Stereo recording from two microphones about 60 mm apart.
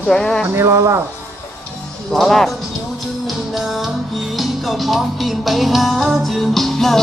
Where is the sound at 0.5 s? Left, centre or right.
Right.